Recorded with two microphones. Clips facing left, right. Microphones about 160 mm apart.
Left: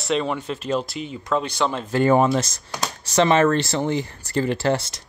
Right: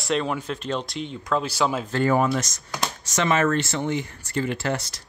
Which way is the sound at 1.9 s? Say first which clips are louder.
Left 6 dB; 20° left (ahead or behind).